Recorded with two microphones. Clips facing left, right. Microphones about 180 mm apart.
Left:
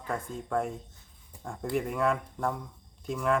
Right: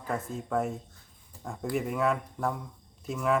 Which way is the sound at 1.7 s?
Centre (ahead or behind).